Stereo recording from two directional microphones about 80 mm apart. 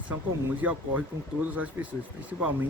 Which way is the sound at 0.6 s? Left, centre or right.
Centre.